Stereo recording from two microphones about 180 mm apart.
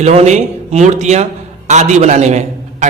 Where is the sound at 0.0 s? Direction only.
35° right (ahead or behind).